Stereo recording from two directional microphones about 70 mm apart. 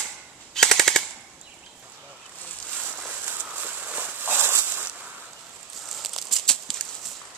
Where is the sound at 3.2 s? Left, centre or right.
Right.